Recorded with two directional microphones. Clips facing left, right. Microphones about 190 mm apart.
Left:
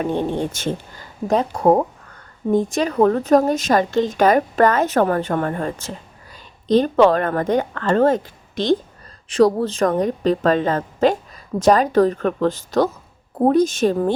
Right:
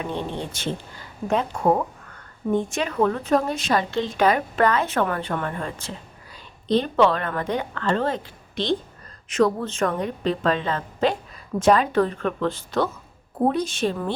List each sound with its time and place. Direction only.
0.0 s a woman's voice: 45° left (ahead or behind)